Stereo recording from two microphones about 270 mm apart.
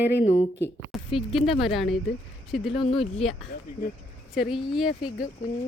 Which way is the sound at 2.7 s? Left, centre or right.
Centre.